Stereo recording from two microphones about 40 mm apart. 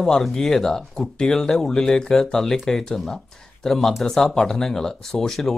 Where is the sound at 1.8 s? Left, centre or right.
Centre.